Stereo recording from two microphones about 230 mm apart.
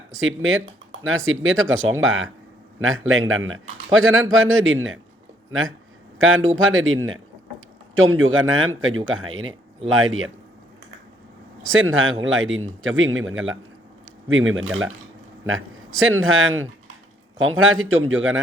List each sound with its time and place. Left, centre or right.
0.2 s speech: right
11.6 s speech: right
16.0 s speech: right